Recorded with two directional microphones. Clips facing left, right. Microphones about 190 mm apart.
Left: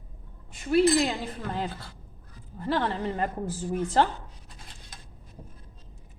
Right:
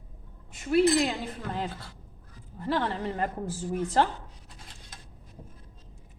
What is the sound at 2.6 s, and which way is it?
A woman's voice, 20° left (ahead or behind).